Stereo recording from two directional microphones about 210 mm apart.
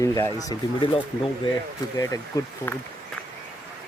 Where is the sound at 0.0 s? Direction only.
15° left (ahead or behind).